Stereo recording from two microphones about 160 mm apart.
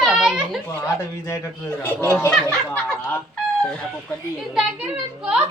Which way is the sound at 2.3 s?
5° left (ahead or behind).